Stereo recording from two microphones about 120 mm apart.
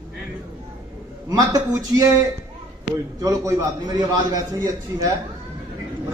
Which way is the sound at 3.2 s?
30° right (ahead or behind).